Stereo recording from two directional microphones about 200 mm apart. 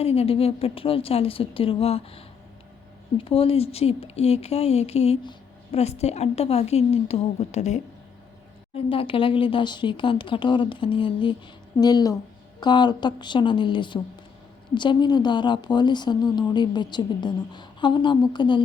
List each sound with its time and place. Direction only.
0.0 s a woman's voice: 30° left (ahead or behind)